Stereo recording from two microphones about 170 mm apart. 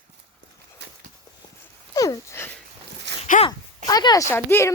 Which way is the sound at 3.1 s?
90° right.